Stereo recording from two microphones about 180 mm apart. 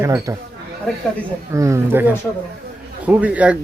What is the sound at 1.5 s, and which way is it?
Speech, 15° right (ahead or behind).